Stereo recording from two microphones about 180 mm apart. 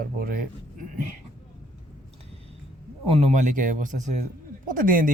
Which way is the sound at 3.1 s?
40° right (ahead or behind).